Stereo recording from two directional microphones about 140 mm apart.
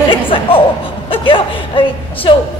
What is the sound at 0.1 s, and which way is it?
Chuckle, 40° left (ahead or behind).